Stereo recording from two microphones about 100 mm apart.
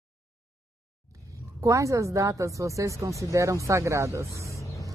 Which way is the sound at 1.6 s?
30° right (ahead or behind).